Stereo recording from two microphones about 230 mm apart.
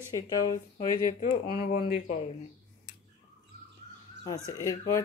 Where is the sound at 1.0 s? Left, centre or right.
Left.